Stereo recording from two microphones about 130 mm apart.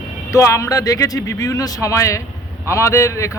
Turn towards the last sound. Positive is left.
turn(degrees=20)  # may be behind; listen again after turning